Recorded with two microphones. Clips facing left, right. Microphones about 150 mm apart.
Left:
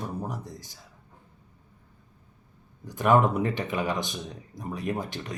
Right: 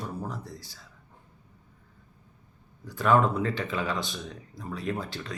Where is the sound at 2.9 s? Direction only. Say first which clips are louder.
Left 1 dB; 20° left (ahead or behind).